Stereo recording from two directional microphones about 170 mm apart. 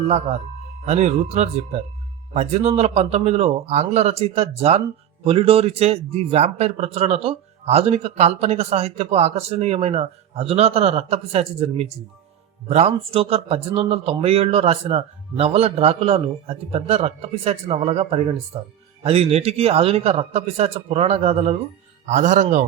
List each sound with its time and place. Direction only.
0.9 s a man's voice: 40° right (ahead or behind)